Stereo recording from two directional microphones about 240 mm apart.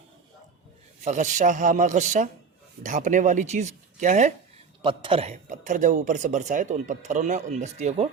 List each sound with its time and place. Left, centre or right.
1.0 s a man's voice: right